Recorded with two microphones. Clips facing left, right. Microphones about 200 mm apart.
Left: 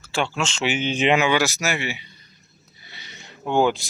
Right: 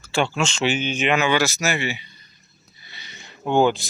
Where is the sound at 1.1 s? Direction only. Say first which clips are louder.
Right 2 dB; 15° left (ahead or behind).